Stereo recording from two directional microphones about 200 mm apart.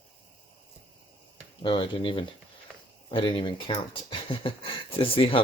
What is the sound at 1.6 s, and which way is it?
Speech, 25° left (ahead or behind).